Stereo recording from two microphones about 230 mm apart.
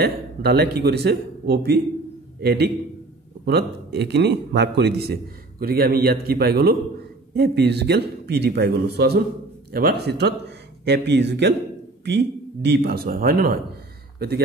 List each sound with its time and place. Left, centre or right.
0.0 s a man's voice: right